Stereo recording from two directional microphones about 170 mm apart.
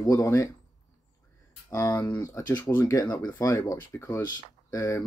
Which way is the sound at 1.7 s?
15° left (ahead or behind).